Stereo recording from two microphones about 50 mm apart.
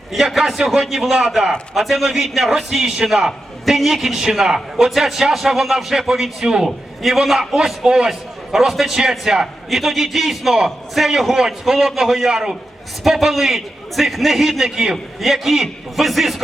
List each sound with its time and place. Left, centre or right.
0.1 s a man's voice: centre
7.9 s a man's voice: centre
8.5 s a man's voice: centre